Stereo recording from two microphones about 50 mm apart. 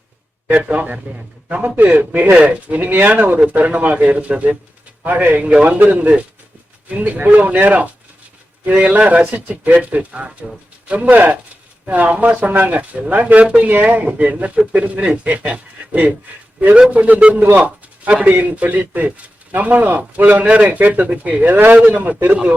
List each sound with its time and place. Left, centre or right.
0.6 s a man's voice: right
21.5 s a man's voice: right